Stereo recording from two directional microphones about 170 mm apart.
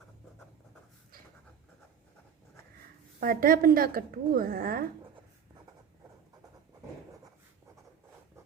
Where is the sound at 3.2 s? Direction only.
55° right (ahead or behind).